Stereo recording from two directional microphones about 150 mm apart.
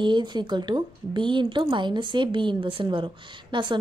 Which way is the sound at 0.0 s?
30° right (ahead or behind).